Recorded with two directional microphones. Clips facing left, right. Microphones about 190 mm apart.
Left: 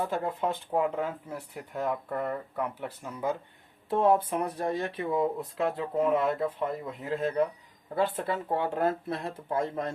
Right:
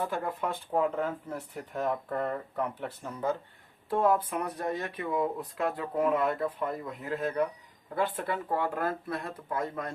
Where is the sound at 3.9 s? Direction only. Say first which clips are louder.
Left 2 dB; 25° left (ahead or behind).